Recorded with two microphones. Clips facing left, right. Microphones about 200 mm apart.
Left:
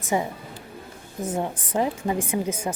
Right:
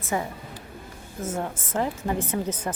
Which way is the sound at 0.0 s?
15° left (ahead or behind).